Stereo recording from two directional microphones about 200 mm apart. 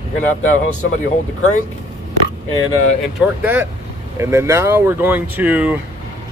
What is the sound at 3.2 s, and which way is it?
A man's voice, 10° right (ahead or behind).